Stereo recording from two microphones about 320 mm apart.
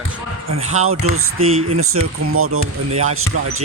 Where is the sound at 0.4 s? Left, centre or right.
Right.